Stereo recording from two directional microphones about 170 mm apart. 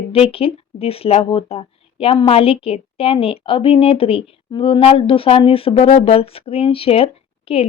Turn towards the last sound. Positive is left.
turn(degrees=35)  # may be behind; listen again after turning